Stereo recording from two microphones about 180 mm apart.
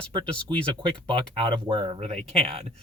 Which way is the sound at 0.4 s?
25° right (ahead or behind).